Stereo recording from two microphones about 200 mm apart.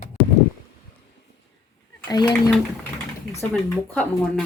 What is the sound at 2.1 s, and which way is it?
Speech, 20° left (ahead or behind).